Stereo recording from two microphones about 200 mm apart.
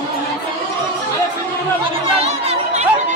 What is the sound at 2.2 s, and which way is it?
Chatter, 30° right (ahead or behind).